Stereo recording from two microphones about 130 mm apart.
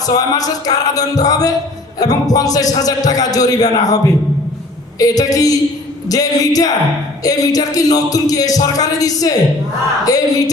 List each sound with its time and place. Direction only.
0.0 s a man's voice: 30° left (ahead or behind)